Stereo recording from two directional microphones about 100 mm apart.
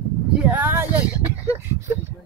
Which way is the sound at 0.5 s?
20° right (ahead or behind).